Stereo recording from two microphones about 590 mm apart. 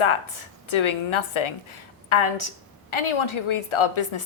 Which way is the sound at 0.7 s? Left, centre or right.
Left.